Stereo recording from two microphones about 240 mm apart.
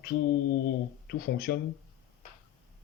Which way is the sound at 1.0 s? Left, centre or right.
Left.